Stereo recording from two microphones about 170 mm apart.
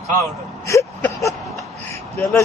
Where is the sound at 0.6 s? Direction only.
20° left (ahead or behind).